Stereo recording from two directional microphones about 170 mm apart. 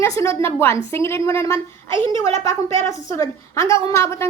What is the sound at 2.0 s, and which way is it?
Speech, 25° right (ahead or behind).